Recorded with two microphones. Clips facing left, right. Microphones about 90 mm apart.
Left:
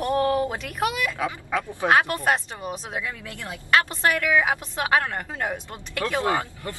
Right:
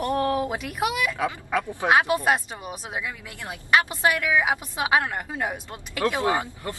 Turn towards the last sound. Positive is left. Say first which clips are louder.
# even
turn(degrees=-20)  # may be behind; listen again after turning